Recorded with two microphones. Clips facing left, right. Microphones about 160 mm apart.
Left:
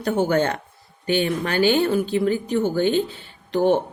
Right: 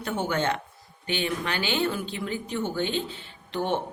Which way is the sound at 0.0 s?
40° left (ahead or behind).